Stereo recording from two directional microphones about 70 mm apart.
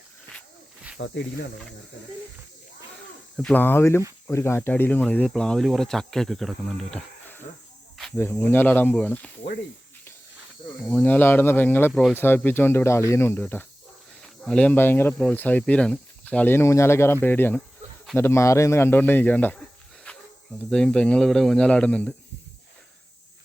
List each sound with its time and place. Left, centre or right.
3.5 s speech: left
4.8 s speech: left
5.3 s speech: centre
8.1 s speech: left
10.8 s speech: left
14.2 s cricket: centre
14.8 s speech: left
16.5 s speech: left
20.1 s cricket: centre
20.7 s speech: centre
21.7 s speech: centre